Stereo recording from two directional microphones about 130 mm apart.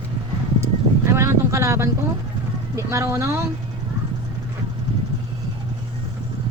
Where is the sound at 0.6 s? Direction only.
20° right (ahead or behind).